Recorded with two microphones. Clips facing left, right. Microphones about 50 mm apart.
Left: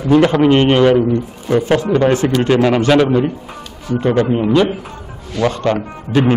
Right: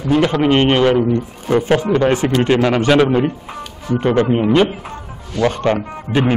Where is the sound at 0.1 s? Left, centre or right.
Centre.